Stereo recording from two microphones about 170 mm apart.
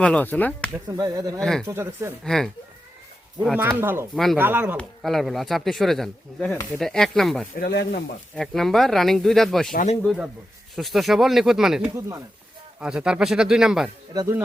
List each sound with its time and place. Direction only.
0.0 s speech: 10° left (ahead or behind)
0.9 s speech: 20° right (ahead or behind)
1.4 s speech: 5° left (ahead or behind)
1.6 s speech: 15° right (ahead or behind)
2.2 s speech: centre (ahead or behind)
3.4 s speech: 10° right (ahead or behind)
4.8 s speech: centre (ahead or behind)
7.6 s speech: 80° left
8.4 s speech: centre (ahead or behind)
9.7 s speech: 40° left (ahead or behind)
10.0 s speech: centre (ahead or behind)
11.9 s speech: 20° right (ahead or behind)
12.8 s speech: 5° right (ahead or behind)
14.1 s speech: 25° right (ahead or behind)